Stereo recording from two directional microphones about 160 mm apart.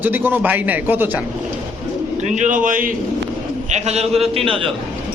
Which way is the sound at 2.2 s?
50° right (ahead or behind).